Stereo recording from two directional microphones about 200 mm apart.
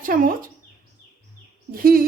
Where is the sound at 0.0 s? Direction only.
45° right (ahead or behind).